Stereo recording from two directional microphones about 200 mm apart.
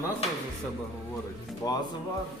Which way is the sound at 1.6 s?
20° left (ahead or behind).